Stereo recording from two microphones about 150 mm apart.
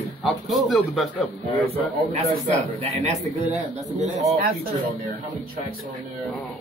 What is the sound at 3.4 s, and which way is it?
Speech, 45° right (ahead or behind).